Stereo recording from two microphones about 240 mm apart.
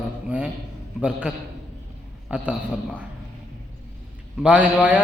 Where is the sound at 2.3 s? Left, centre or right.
Centre.